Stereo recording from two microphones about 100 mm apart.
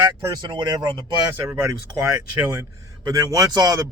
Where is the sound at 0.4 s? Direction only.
55° right (ahead or behind).